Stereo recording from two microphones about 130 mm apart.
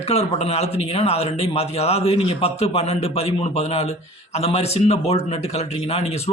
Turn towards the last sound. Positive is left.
turn(degrees=55)  # may be behind; listen again after turning